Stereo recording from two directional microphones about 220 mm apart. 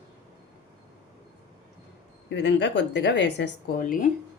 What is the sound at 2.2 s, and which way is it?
A woman's voice, 55° left (ahead or behind).